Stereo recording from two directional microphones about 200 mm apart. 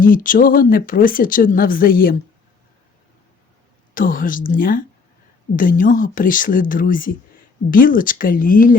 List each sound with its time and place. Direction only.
0.0 s speech: 45° left (ahead or behind)
3.9 s speech: 45° left (ahead or behind)